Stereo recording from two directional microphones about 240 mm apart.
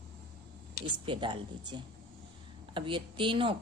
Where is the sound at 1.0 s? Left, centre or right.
Right.